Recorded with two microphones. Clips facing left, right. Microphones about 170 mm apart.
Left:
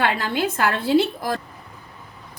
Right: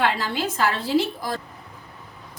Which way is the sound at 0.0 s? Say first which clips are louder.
Left 2 dB; 55° left (ahead or behind).